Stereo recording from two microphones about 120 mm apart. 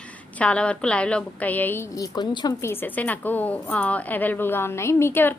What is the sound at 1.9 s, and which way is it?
Speech, 30° left (ahead or behind).